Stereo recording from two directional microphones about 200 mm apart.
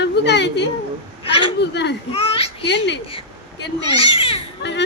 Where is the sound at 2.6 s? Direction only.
60° left (ahead or behind).